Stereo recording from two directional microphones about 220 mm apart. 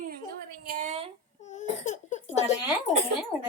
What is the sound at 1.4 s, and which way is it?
Crying, 35° left (ahead or behind).